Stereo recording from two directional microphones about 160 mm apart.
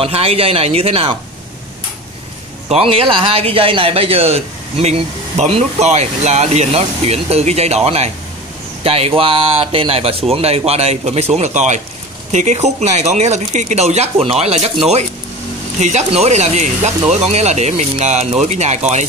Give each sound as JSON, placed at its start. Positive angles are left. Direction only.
{"t": 0.0, "sound": "a man's voice", "side_deg": -40}
{"t": 2.7, "sound": "a man's voice", "side_deg": -35}